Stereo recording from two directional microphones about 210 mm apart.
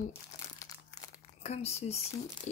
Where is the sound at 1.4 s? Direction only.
30° left (ahead or behind).